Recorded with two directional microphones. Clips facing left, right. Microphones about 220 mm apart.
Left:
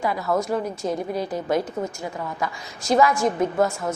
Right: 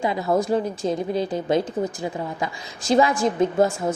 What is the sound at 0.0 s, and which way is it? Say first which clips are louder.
A woman's voice: right 2 dB; 25° right (ahead or behind).